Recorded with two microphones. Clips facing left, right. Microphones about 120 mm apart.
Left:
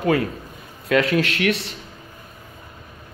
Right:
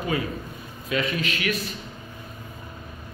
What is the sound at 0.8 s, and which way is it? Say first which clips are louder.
Speech: left 8 dB; 80° left.